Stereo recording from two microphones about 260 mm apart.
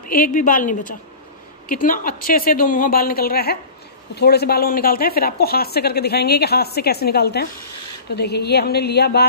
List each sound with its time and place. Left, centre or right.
0.1 s speech: left